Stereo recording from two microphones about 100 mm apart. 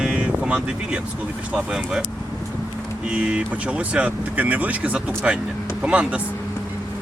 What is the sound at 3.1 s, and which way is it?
Speech, 10° right (ahead or behind).